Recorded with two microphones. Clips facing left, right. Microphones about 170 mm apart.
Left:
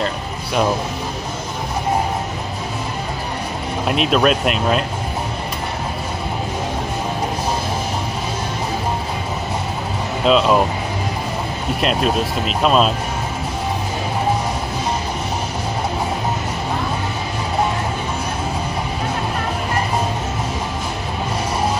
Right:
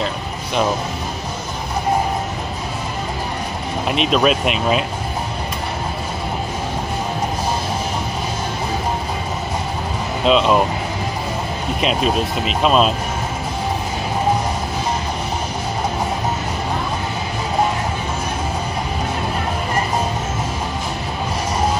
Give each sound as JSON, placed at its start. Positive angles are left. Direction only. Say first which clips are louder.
{"t": 3.9, "sound": "speech", "louder": "even", "side_deg": 0}
{"t": 10.2, "sound": "speech", "louder": "even", "side_deg": 0}
{"t": 11.8, "sound": "speech", "louder": "even", "side_deg": 0}